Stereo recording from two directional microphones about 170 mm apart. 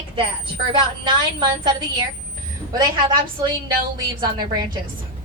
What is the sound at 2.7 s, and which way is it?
Speech, 25° right (ahead or behind).